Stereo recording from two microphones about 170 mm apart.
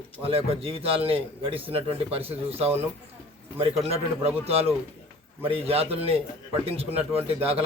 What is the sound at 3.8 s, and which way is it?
A man's voice, 35° right (ahead or behind).